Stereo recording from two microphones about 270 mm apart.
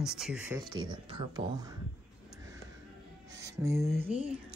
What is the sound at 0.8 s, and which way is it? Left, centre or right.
Speech, centre.